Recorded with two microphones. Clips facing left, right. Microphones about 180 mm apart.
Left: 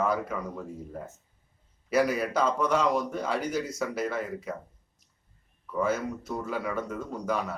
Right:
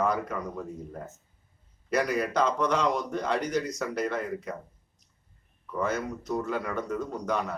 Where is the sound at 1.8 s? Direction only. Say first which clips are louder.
Left 2 dB; 5° left (ahead or behind).